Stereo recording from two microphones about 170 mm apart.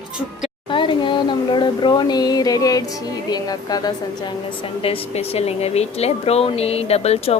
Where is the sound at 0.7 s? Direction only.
30° left (ahead or behind).